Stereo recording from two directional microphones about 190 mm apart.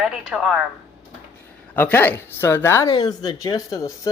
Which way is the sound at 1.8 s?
10° left (ahead or behind).